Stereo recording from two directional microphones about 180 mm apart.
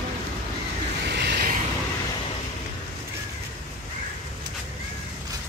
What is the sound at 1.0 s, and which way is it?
Vehicle, 65° right (ahead or behind).